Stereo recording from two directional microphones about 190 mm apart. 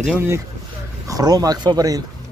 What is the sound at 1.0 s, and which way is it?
Speech, 20° right (ahead or behind).